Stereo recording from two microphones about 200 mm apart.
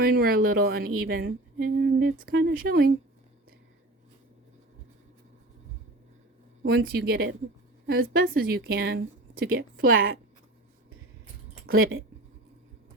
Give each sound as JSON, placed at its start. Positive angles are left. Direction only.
{"t": 0.0, "sound": "a woman's voice", "side_deg": -50}
{"t": 6.6, "sound": "a woman's voice", "side_deg": -55}
{"t": 11.7, "sound": "speech", "side_deg": -90}